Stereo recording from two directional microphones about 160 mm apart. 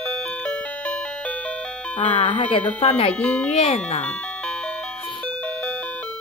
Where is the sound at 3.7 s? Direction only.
40° left (ahead or behind).